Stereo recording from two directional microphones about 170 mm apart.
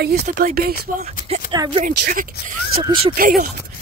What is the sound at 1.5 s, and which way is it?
Speech, 25° right (ahead or behind).